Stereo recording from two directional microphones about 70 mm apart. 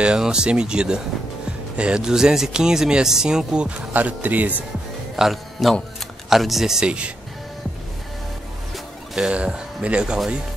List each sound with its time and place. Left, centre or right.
0.0 s speech: centre
3.9 s speech: right
5.1 s speech: centre
8.7 s speech: centre